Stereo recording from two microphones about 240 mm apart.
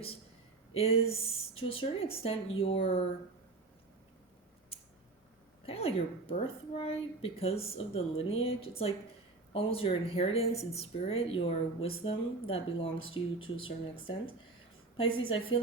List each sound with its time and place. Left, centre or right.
0.7 s a woman's voice: left
5.6 s a woman's voice: left